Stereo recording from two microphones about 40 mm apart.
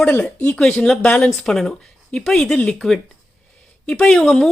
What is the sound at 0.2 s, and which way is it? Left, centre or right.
Speech, left.